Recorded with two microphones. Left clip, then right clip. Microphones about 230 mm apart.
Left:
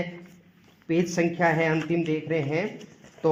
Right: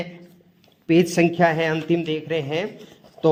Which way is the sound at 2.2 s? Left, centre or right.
Right.